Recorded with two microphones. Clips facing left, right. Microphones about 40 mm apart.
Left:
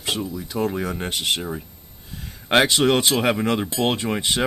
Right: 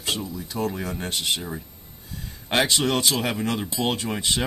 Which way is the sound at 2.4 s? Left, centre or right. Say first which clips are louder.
Left 5 dB; left.